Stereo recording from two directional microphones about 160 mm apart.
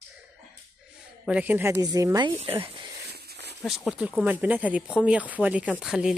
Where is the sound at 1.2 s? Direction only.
10° right (ahead or behind).